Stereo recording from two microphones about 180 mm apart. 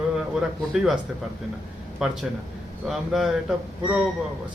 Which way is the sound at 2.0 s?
Centre (ahead or behind).